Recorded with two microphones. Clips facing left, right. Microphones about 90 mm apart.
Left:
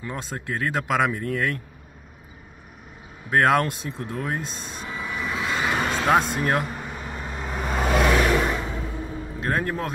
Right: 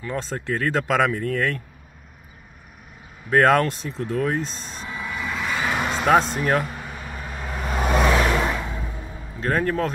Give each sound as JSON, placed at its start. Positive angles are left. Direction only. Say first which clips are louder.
{"t": 0.0, "sound": "speech", "louder": "right 4 dB", "side_deg": 10}
{"t": 3.3, "sound": "speech", "louder": "right 2 dB", "side_deg": 5}
{"t": 4.8, "sound": "a sound", "louder": "right 1 dB", "side_deg": 25}
{"t": 5.2, "sound": "vehicle", "louder": "even", "side_deg": 5}
{"t": 6.1, "sound": "speech", "louder": "right 4 dB", "side_deg": 10}
{"t": 7.0, "sound": "vehicle", "louder": "left 1 dB", "side_deg": 20}
{"t": 7.7, "sound": "vehicle", "louder": "right 1 dB", "side_deg": 0}
{"t": 8.2, "sound": "a sound", "louder": "even", "side_deg": -5}
{"t": 9.4, "sound": "speech", "louder": "right 4 dB", "side_deg": 10}